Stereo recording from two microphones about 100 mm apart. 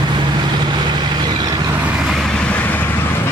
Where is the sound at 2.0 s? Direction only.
Centre (ahead or behind).